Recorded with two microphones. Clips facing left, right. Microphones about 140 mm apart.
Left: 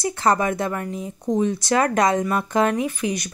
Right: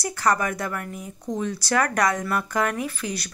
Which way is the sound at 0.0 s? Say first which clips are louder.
Left 3 dB; 25° left (ahead or behind).